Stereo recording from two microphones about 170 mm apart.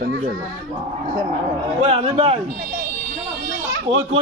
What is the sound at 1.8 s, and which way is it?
Speech, 35° right (ahead or behind).